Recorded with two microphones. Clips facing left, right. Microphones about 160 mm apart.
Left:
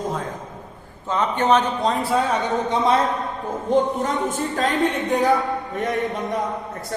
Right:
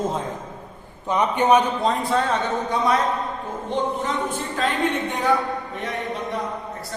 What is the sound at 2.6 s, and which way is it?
Speech, 25° left (ahead or behind).